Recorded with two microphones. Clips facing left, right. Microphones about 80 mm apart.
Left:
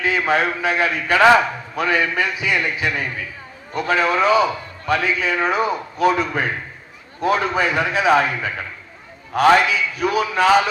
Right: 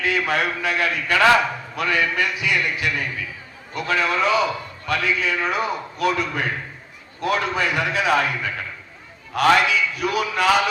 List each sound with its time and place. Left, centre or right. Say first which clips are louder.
0.0 s a man's voice: left 3 dB; left
9.6 s a man's voice: left 1 dB; left